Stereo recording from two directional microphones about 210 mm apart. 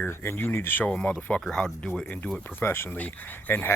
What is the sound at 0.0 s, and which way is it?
Speech, 10° left (ahead or behind).